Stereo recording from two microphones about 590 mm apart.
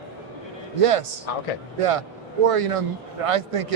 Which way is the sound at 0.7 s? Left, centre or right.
Right.